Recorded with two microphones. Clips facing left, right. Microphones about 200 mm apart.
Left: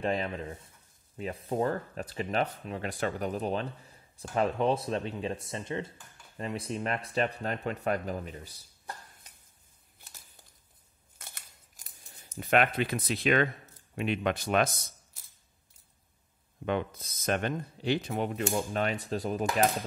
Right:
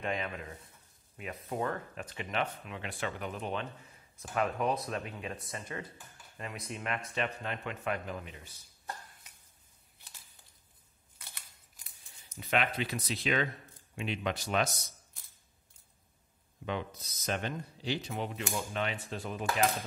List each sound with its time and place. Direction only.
0.0 s speech: 35° left (ahead or behind)
11.1 s scissors: 45° left (ahead or behind)
12.4 s speech: 50° left (ahead or behind)
16.6 s speech: 55° left (ahead or behind)